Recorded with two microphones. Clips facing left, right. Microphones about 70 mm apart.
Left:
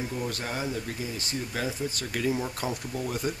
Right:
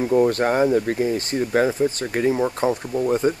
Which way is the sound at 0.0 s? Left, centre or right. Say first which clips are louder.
Right 15 dB; right.